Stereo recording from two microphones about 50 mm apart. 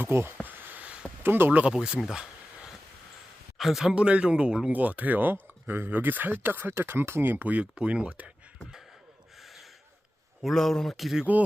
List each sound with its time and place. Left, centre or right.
0.0 s speech: right
0.4 s a sound: right
1.2 s speech: right
1.7 s a man's voice: centre
2.0 s a sound: centre
3.6 s a man's voice: centre
3.9 s a man's voice: right
4.7 s speech: right
7.5 s a man's voice: right
9.4 s gasp: centre
10.5 s speech: centre